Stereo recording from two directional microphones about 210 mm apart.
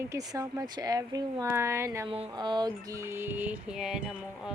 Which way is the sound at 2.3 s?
20° right (ahead or behind).